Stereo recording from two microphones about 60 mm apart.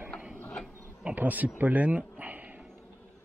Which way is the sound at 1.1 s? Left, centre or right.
Right.